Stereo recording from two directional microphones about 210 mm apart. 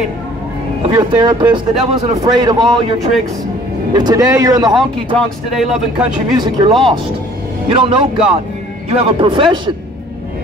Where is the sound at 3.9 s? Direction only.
20° right (ahead or behind).